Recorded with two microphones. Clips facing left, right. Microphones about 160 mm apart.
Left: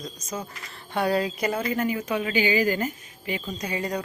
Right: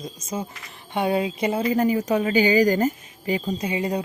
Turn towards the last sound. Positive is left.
turn(degrees=-25)  # may be behind; listen again after turning